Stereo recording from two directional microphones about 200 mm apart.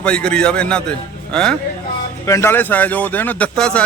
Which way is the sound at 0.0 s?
5° left (ahead or behind).